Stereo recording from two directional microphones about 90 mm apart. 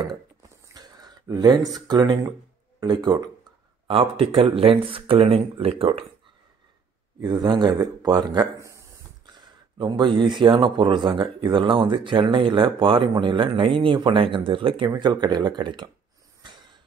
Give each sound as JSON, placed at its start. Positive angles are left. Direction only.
{"t": 0.4, "sound": "a sound", "side_deg": -45}
{"t": 1.2, "sound": "speech", "side_deg": -40}
{"t": 3.8, "sound": "speech", "side_deg": -90}
{"t": 7.2, "sound": "speech", "side_deg": -55}
{"t": 8.5, "sound": "a sound", "side_deg": -35}
{"t": 9.8, "sound": "speech", "side_deg": -60}
{"t": 15.0, "sound": "speech", "side_deg": -50}